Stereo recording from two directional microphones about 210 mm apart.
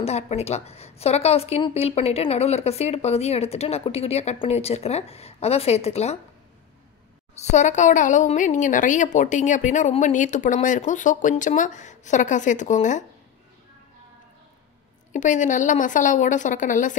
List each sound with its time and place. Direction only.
0.0 s a woman's voice: 30° left (ahead or behind)
7.3 s speech: 35° left (ahead or behind)
15.1 s speech: 35° left (ahead or behind)